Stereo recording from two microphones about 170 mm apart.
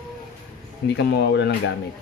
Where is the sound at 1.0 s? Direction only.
80° left.